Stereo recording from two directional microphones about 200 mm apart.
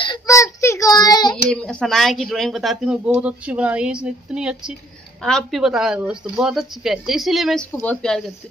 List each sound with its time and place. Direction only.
0.0 s child singing: 20° left (ahead or behind)
1.3 s speech: 5° left (ahead or behind)